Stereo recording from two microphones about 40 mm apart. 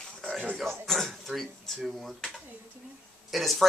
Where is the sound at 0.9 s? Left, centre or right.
Centre.